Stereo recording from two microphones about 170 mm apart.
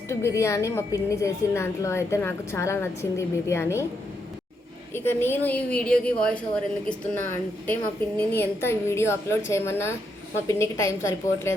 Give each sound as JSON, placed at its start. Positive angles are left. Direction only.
{"t": 0.1, "sound": "a woman's voice", "side_deg": 15}
{"t": 4.9, "sound": "a woman's voice", "side_deg": 15}
{"t": 7.7, "sound": "a woman's voice", "side_deg": 10}